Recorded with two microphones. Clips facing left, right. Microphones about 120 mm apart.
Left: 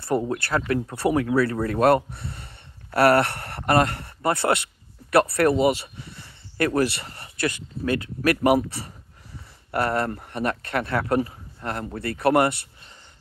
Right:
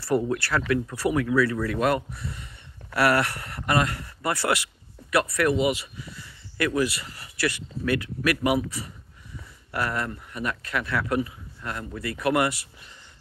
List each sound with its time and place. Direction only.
0.0 s speech: 25° left (ahead or behind)